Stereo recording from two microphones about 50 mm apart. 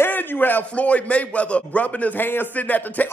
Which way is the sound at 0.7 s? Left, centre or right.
Left.